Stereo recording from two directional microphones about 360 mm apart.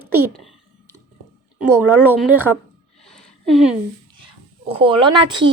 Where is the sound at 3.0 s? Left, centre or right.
Centre.